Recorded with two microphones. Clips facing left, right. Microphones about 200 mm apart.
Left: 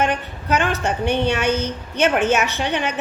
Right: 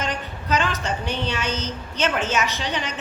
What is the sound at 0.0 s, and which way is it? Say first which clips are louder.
A woman's voice: left 7 dB; 60° left (ahead or behind).